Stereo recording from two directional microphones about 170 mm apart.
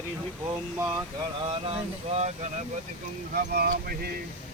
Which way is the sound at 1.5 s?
35° right (ahead or behind).